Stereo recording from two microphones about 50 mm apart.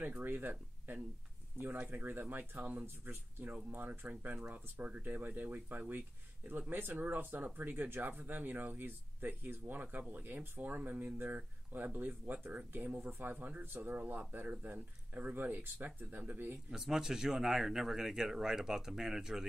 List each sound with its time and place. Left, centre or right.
0.2 s speech: right
3.1 s speech: right
16.7 s speech: centre